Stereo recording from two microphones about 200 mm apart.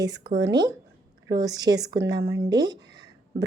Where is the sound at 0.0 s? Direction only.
20° right (ahead or behind).